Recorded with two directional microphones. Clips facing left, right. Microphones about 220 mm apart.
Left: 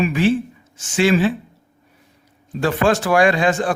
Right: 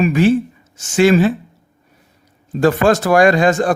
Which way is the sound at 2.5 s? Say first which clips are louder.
Right 4 dB; 40° right (ahead or behind).